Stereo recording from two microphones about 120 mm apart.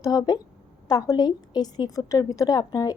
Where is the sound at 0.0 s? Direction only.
35° left (ahead or behind).